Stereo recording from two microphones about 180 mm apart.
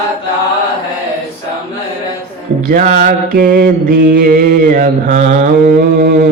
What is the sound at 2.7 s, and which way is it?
Mantra, 50° right (ahead or behind).